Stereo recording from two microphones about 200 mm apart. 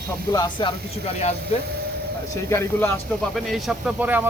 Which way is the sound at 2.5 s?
10° left (ahead or behind).